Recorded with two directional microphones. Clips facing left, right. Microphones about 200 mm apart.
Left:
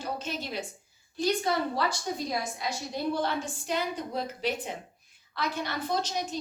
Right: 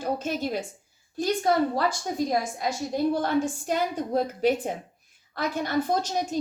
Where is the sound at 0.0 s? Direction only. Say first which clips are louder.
Right 7 dB; 50° right (ahead or behind).